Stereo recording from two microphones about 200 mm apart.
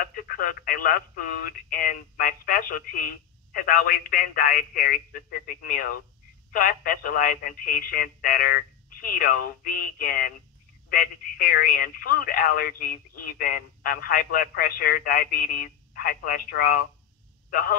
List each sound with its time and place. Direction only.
0.0 s a man's voice: 45° left (ahead or behind)